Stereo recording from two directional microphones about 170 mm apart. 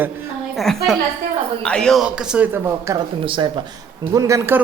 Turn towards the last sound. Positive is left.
turn(degrees=-15)  # may be behind; listen again after turning